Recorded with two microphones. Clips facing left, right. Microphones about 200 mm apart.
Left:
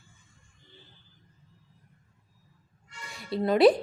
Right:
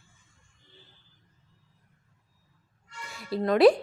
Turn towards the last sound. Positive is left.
turn(degrees=0)  # may be behind; listen again after turning